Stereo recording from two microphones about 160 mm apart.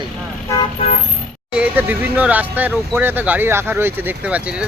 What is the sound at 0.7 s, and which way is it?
Vehicle, 45° left (ahead or behind).